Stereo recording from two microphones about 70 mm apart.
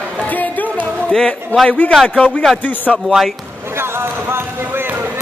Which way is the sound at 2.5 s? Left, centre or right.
Left.